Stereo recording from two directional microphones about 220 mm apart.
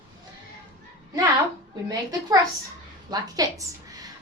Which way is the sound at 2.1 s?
15° right (ahead or behind).